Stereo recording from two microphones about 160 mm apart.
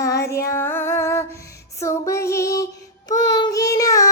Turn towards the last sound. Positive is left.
turn(degrees=20)  # may be behind; listen again after turning